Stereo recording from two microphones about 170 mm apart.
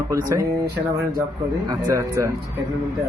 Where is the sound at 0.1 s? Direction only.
20° right (ahead or behind).